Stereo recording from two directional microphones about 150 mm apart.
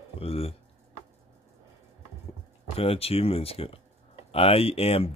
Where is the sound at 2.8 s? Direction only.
40° left (ahead or behind).